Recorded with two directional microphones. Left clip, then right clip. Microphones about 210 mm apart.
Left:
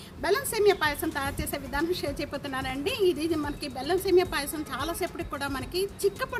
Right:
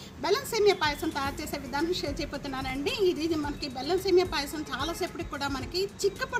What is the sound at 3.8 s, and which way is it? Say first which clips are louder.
Speech: left 1 dB; 5° left (ahead or behind).